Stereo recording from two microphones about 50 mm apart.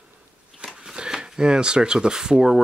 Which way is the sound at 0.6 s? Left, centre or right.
Centre.